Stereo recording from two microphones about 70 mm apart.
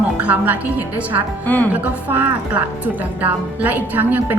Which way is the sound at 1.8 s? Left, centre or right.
Right.